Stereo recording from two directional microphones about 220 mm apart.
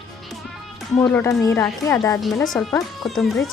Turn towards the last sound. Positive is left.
turn(degrees=0)  # may be behind; listen again after turning